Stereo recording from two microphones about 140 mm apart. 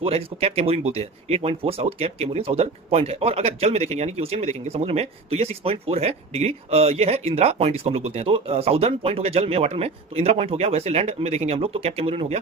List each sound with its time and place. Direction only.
0.0 s speech: 40° right (ahead or behind)